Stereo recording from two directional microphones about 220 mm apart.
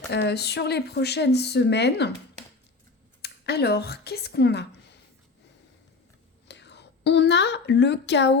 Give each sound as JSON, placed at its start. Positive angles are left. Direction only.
{"t": 0.1, "sound": "speech", "side_deg": 50}
{"t": 3.2, "sound": "speech", "side_deg": 45}
{"t": 6.5, "sound": "speech", "side_deg": 50}